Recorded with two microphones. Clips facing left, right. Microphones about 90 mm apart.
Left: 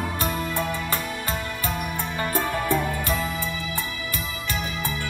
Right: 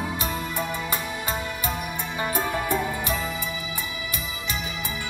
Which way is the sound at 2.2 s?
15° right (ahead or behind).